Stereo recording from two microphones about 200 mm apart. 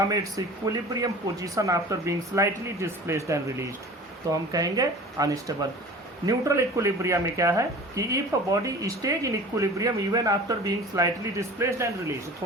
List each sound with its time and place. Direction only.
0.1 s speech: 15° right (ahead or behind)
4.5 s speech: 20° right (ahead or behind)